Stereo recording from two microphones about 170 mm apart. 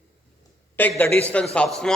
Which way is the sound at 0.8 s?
10° left (ahead or behind).